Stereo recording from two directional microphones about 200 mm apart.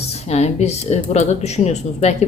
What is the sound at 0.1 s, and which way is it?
A woman's voice, 30° left (ahead or behind).